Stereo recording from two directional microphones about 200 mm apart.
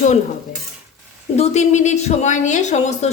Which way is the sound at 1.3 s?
35° left (ahead or behind).